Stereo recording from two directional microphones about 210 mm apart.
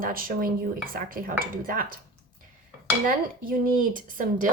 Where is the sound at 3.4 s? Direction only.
40° right (ahead or behind).